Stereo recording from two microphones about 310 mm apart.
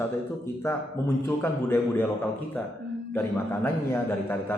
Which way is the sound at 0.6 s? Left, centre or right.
Centre.